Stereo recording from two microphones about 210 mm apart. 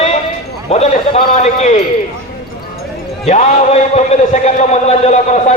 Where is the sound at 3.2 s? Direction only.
35° left (ahead or behind).